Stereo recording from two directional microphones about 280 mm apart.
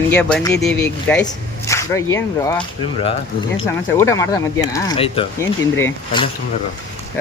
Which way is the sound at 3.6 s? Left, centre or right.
Centre.